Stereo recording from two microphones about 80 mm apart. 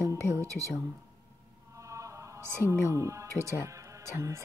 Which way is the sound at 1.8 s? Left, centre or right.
Right.